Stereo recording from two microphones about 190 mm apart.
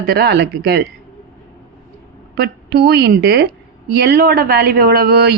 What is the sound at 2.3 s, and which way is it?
Speech, 60° right (ahead or behind).